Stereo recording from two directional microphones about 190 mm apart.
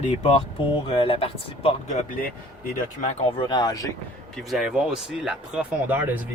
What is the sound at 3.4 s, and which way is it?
Speech, 20° left (ahead or behind).